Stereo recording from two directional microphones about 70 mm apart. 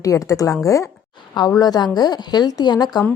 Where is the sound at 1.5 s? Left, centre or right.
Left.